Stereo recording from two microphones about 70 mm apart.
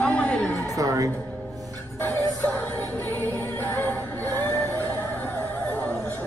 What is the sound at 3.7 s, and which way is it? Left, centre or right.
Music, left.